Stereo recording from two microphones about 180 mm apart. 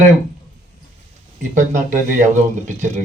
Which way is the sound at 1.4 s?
45° right (ahead or behind).